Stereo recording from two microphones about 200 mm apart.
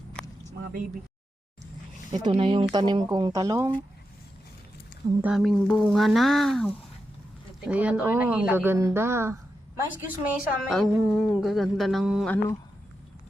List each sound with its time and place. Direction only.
2.2 s speech: 25° right (ahead or behind)
5.2 s speech: centre (ahead or behind)
7.7 s speech: 5° right (ahead or behind)